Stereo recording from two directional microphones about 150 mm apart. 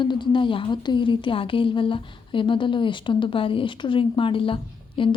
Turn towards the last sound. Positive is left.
turn(degrees=35)  # may be behind; listen again after turning